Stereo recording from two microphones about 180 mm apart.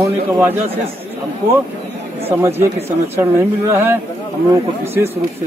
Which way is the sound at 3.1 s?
15° right (ahead or behind).